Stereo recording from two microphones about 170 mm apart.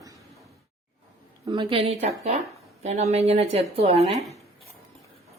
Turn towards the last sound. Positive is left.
turn(degrees=-40)  # may be behind; listen again after turning